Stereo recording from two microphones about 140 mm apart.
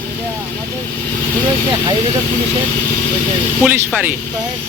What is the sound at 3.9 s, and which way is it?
Speech, 10° right (ahead or behind).